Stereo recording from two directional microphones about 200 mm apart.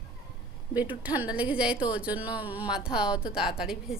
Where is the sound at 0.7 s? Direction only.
10° right (ahead or behind).